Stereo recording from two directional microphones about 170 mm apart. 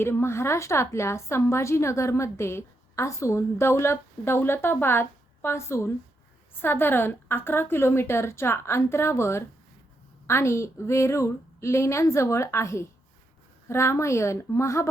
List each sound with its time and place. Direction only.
0.0 s a woman's voice: 15° left (ahead or behind)